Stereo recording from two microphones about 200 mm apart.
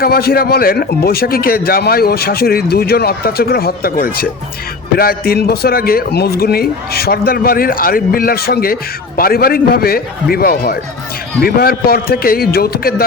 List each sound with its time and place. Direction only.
0.0 s a man's voice: 50° left (ahead or behind)